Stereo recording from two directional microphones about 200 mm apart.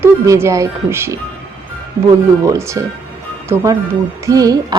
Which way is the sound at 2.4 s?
15° right (ahead or behind).